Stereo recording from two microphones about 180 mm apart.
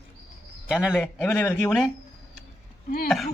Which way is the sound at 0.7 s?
5° right (ahead or behind).